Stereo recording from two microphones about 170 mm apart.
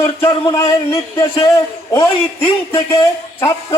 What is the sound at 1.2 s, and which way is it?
Speech, 20° left (ahead or behind).